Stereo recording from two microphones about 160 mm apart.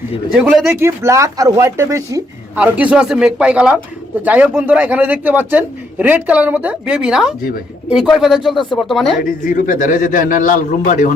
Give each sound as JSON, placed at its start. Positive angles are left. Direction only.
{"t": 0.3, "sound": "speech", "side_deg": -5}
{"t": 0.8, "sound": "speech", "side_deg": -15}
{"t": 2.6, "sound": "a man's voice", "side_deg": -10}
{"t": 9.4, "sound": "speech", "side_deg": 60}